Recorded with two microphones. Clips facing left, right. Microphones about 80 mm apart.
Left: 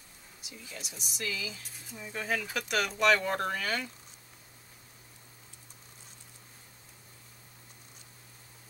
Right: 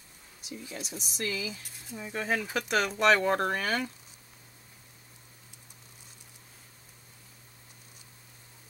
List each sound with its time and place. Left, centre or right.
0.5 s speech: right